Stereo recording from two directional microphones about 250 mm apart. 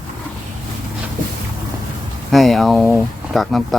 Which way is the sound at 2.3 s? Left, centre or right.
Centre.